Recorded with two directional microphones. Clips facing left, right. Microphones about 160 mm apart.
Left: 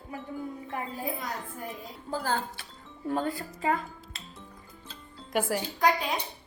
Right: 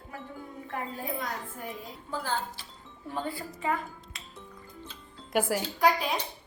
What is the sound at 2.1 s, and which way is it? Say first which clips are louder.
Wind chime: left 2 dB; 45° left (ahead or behind).